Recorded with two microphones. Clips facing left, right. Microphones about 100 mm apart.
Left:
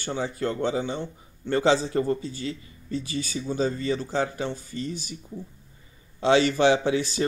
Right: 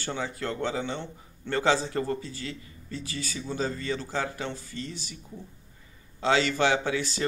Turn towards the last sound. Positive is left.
turn(degrees=20)  # may be behind; listen again after turning